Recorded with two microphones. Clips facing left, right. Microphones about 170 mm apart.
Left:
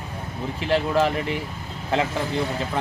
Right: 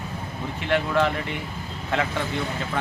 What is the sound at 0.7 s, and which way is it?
Speech, 35° left (ahead or behind).